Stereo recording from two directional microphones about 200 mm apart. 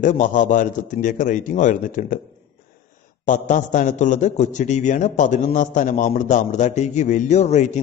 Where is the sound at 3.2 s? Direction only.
40° left (ahead or behind).